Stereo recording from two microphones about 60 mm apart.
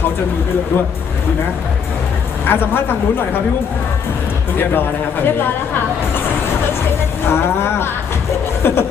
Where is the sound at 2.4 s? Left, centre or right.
Left.